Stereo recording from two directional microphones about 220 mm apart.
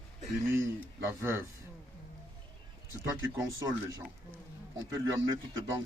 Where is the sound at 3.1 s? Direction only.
15° right (ahead or behind).